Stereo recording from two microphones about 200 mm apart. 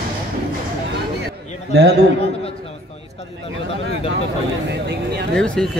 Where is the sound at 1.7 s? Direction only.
60° right (ahead or behind).